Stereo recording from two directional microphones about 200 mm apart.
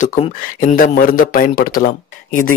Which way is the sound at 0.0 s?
40° left (ahead or behind).